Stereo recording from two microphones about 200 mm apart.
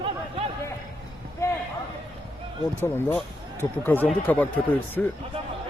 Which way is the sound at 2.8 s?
10° left (ahead or behind).